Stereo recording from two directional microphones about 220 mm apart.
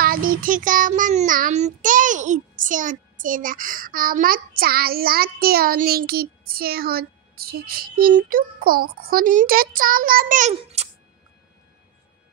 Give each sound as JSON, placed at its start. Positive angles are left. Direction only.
{"t": 0.0, "sound": "child singing", "side_deg": -40}
{"t": 10.5, "sound": "a child's voice", "side_deg": -30}